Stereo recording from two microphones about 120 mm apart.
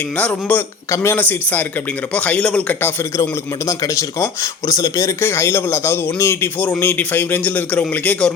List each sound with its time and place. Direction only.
0.2 s a man's voice: 10° left (ahead or behind)
0.9 s a man's voice: 25° left (ahead or behind)